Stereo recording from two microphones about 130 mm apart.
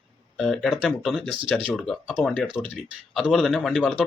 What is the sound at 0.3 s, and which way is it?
Speech, centre (ahead or behind).